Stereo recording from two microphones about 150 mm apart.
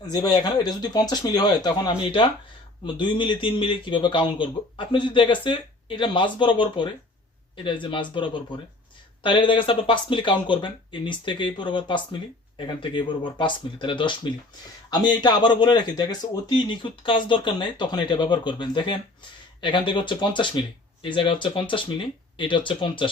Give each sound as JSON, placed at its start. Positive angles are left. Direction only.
{"t": 0.1, "sound": "speech", "side_deg": 30}